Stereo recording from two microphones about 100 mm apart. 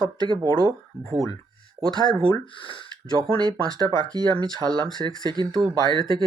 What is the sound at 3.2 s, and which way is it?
Speech, 45° right (ahead or behind).